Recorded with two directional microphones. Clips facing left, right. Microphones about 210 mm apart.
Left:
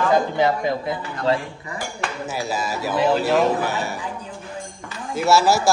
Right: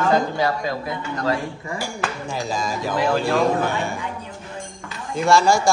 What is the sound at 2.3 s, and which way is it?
Speech, 5° left (ahead or behind).